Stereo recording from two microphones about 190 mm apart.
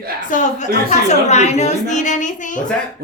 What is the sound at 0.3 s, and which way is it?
A woman's voice, 40° left (ahead or behind).